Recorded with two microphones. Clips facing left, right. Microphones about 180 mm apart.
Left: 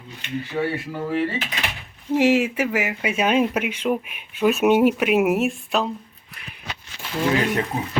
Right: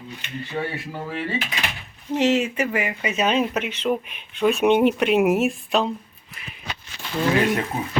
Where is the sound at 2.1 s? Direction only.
10° left (ahead or behind).